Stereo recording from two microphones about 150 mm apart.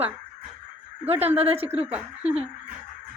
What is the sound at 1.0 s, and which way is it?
Speech, 45° right (ahead or behind).